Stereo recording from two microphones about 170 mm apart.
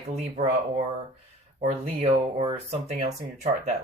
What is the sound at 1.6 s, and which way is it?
Speech, 40° right (ahead or behind).